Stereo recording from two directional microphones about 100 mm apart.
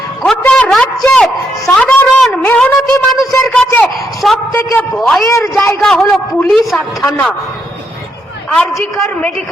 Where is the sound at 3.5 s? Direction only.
10° left (ahead or behind).